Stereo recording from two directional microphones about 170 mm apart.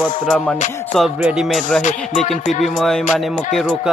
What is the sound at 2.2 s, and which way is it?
Speech, 40° left (ahead or behind).